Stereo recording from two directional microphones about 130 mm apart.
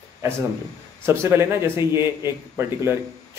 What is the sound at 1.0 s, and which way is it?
A man's voice, 20° right (ahead or behind).